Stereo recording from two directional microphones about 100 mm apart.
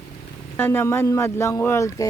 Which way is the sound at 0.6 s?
20° left (ahead or behind).